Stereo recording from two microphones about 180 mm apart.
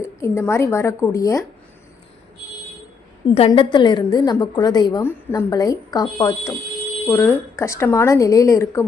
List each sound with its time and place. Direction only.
0.0 s speech: 15° left (ahead or behind)
3.3 s a woman's voice: 30° left (ahead or behind)